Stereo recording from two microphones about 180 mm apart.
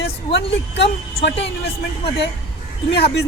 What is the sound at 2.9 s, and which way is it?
Speech, 65° left (ahead or behind).